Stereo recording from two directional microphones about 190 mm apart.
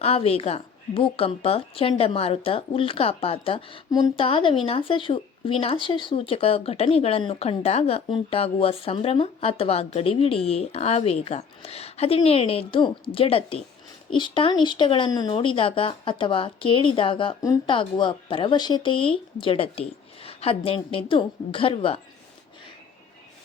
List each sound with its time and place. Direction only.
0.0 s a woman's voice: 30° left (ahead or behind)